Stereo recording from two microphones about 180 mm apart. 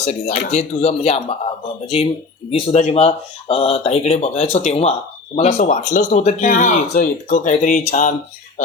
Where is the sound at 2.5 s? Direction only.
35° left (ahead or behind).